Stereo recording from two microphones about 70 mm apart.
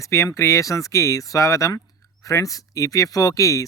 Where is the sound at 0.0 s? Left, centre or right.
Left.